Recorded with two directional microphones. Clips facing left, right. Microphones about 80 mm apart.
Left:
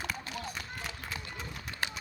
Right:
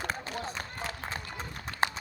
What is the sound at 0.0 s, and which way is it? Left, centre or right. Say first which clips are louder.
Run: right 3 dB; right.